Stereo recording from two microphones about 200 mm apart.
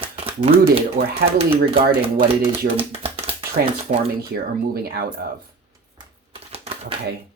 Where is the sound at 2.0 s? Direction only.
25° right (ahead or behind).